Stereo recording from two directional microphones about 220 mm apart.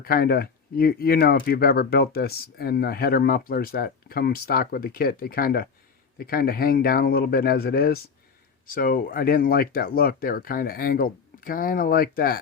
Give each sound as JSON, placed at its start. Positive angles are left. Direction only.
{"t": 0.0, "sound": "speech", "side_deg": 40}